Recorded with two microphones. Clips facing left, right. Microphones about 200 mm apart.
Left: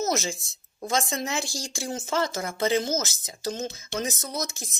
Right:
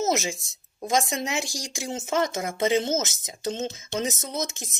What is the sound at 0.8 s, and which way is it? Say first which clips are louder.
Speech: right 2 dB; 15° right (ahead or behind).